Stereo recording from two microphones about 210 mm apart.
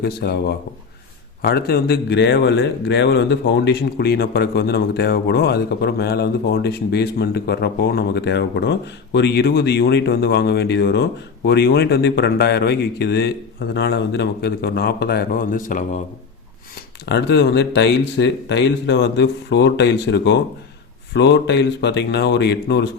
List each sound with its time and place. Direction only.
0.0 s a man's voice: 50° left (ahead or behind)
17.1 s speech: 55° left (ahead or behind)